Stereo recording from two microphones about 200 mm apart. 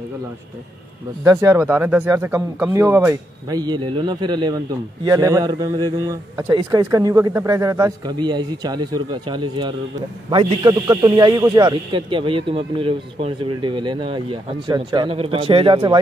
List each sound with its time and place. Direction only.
1.2 s a man's voice: 15° right (ahead or behind)